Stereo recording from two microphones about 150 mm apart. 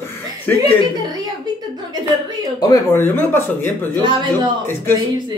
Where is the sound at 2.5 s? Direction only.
25° left (ahead or behind).